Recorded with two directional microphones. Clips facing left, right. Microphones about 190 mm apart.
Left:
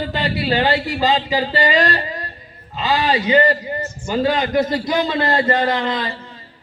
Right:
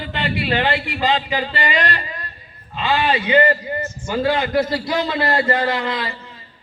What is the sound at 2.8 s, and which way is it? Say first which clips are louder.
Speech: left 1 dB; 35° left (ahead or behind).